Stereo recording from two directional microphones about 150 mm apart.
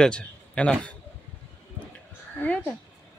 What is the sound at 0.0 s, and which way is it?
Speech, 5° left (ahead or behind).